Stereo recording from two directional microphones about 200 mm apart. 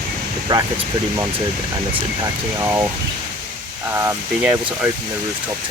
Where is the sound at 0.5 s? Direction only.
20° right (ahead or behind).